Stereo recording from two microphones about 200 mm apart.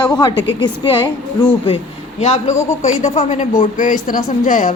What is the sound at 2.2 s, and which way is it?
Speech, 30° left (ahead or behind).